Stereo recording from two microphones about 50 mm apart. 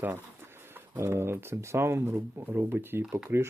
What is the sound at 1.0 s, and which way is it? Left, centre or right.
Speech, right.